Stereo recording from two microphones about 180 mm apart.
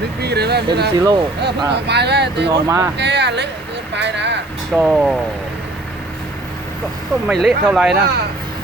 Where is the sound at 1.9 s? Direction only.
70° right (ahead or behind).